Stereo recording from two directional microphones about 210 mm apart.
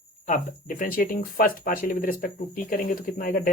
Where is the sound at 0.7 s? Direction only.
40° left (ahead or behind).